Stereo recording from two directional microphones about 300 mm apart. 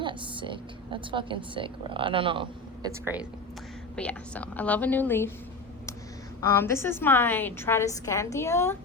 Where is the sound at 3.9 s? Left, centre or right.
Centre.